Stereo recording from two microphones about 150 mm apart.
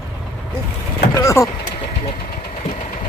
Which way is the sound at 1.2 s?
20° left (ahead or behind).